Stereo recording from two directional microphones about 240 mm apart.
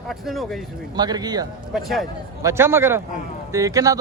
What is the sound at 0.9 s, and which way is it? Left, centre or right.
Speech, centre.